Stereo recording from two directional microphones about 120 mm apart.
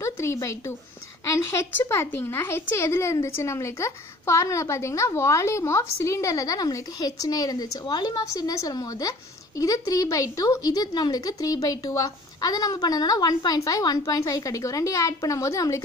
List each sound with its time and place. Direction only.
0.0 s speech: 25° left (ahead or behind)